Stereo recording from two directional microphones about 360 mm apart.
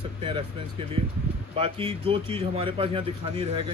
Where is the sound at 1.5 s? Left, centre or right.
Centre.